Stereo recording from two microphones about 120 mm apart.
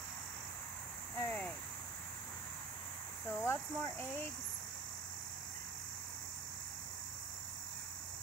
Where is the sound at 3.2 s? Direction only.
15° left (ahead or behind).